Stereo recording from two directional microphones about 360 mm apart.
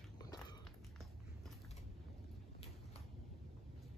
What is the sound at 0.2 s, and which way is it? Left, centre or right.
Walk, centre.